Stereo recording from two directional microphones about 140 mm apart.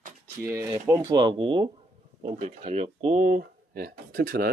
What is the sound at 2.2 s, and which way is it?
Speech, 50° right (ahead or behind).